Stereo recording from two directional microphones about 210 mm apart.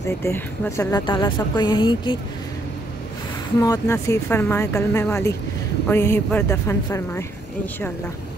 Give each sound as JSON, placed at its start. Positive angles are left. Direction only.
{"t": 0.2, "sound": "speech", "side_deg": 15}
{"t": 3.6, "sound": "speech", "side_deg": 15}